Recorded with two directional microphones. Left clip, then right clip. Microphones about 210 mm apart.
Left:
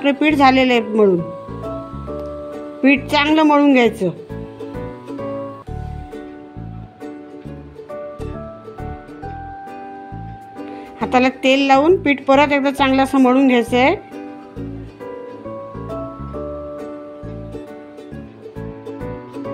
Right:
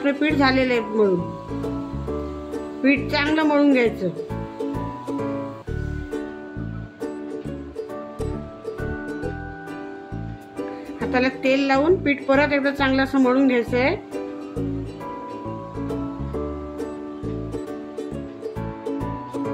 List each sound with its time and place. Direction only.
0.0 s a woman's voice: 35° left (ahead or behind)
2.8 s a woman's voice: 35° left (ahead or behind)
11.0 s a woman's voice: 35° left (ahead or behind)